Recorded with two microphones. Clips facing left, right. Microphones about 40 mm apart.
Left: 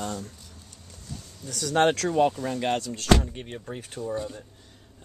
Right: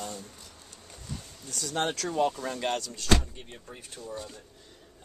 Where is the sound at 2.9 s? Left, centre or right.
Left.